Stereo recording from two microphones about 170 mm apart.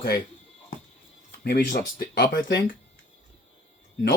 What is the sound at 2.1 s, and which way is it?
Speech, 60° left (ahead or behind).